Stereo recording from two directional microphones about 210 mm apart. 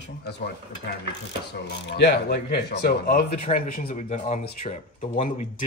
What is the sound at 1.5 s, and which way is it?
Speech, 55° left (ahead or behind).